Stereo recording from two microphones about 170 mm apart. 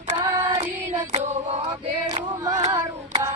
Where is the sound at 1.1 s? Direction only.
40° right (ahead or behind).